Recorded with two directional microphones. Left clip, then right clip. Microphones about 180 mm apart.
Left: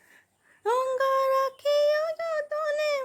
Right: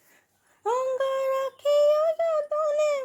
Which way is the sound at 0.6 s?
25° left (ahead or behind).